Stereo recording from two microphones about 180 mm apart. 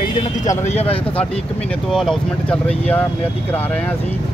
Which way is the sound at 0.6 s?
35° left (ahead or behind).